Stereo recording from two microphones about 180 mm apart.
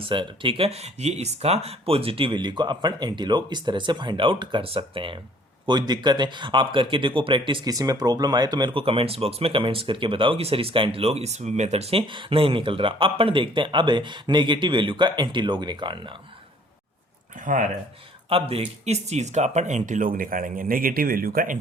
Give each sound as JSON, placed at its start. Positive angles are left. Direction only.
{"t": 0.0, "sound": "speech", "side_deg": -30}
{"t": 17.4, "sound": "speech", "side_deg": -45}
{"t": 18.3, "sound": "speech", "side_deg": -35}